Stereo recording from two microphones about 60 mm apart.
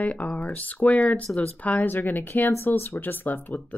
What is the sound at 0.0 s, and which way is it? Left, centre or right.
Speech, left.